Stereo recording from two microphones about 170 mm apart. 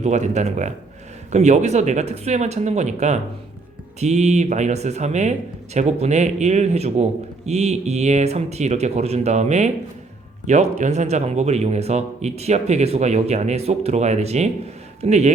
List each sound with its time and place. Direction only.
0.0 s speech: 45° right (ahead or behind)